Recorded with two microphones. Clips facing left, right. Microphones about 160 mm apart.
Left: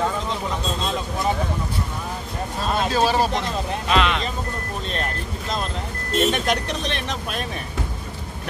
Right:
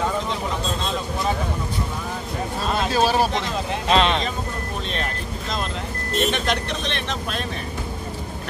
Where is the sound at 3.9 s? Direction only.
30° right (ahead or behind).